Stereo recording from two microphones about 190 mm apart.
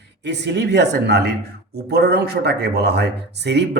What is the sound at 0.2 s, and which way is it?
Speech, 65° right (ahead or behind).